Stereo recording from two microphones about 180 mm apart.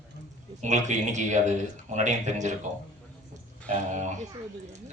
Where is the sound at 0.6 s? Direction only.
40° right (ahead or behind).